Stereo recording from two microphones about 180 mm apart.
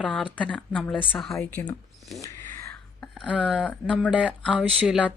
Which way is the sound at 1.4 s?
15° left (ahead or behind).